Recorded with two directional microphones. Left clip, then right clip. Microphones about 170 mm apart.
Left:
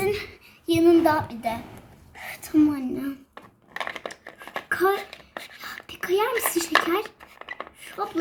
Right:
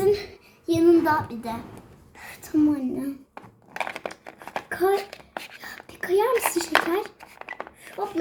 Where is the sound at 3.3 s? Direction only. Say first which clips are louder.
Right 2 dB; 10° right (ahead or behind).